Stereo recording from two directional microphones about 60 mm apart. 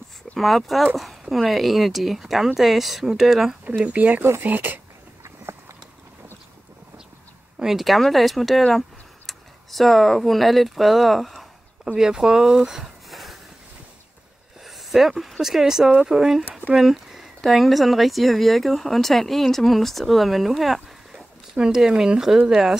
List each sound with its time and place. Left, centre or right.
0.4 s speech: centre
3.6 s speech: right
5.5 s clip-clop: right
7.5 s speech: centre
8.7 s a sound: centre
12.0 s speech: centre
14.6 s speech: centre